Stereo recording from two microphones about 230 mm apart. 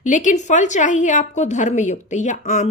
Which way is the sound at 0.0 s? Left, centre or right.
Left.